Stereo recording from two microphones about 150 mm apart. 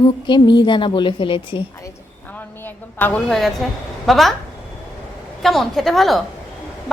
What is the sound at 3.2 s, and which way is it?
A woman's voice, centre (ahead or behind).